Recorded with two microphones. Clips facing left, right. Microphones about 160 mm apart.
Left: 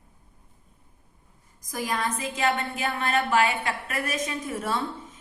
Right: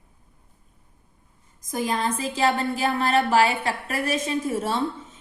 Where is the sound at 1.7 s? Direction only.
25° right (ahead or behind).